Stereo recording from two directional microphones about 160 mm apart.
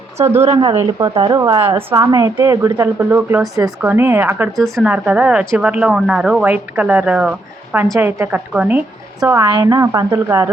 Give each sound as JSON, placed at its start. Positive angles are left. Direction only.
{"t": 0.2, "sound": "speech", "side_deg": -15}
{"t": 0.5, "sound": "a woman's voice", "side_deg": -30}
{"t": 1.4, "sound": "a woman's voice", "side_deg": -20}
{"t": 4.5, "sound": "a woman's voice", "side_deg": 0}